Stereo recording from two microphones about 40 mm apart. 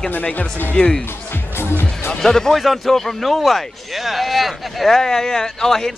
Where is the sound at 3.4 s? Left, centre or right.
Centre.